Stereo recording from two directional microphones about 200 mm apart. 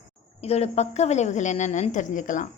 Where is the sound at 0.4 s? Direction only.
30° left (ahead or behind).